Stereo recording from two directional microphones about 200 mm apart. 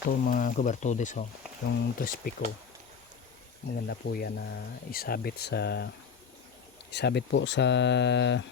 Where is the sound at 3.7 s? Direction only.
50° left (ahead or behind).